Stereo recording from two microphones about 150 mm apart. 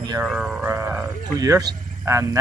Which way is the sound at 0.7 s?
15° right (ahead or behind).